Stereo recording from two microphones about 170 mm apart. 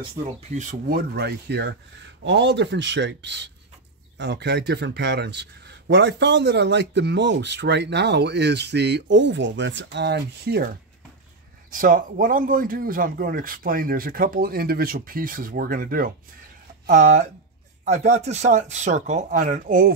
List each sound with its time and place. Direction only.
0.6 s a man's voice: 55° right (ahead or behind)
11.7 s speech: 55° right (ahead or behind)
16.9 s speech: 45° right (ahead or behind)